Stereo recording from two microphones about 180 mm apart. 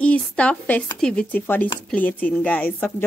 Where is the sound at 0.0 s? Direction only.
5° left (ahead or behind).